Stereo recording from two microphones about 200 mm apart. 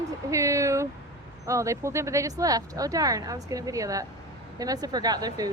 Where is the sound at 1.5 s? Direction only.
15° right (ahead or behind).